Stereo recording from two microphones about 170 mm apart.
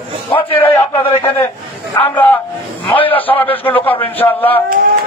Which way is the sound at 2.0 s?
10° left (ahead or behind).